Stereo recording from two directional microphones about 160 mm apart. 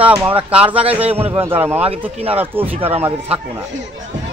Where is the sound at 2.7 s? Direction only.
35° right (ahead or behind).